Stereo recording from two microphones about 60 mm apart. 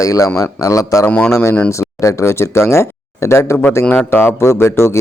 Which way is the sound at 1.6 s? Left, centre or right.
Left.